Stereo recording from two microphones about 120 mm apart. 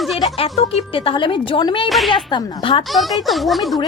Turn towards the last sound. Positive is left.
turn(degrees=0)  # may be behind; listen again after turning